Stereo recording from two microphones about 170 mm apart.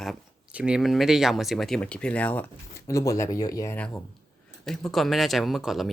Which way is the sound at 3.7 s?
10° left (ahead or behind).